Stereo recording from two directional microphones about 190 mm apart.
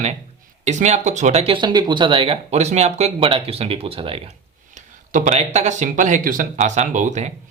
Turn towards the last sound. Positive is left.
turn(degrees=-40)  # may be behind; listen again after turning